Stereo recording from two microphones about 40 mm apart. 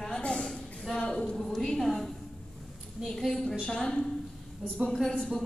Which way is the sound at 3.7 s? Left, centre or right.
Centre.